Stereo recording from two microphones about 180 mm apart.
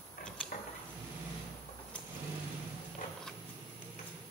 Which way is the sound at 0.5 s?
45° left (ahead or behind).